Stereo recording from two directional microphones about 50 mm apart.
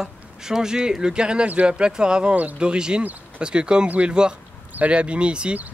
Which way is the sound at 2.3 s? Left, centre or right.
Right.